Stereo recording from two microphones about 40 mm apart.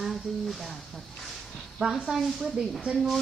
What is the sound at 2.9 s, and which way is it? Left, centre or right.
Speech, centre.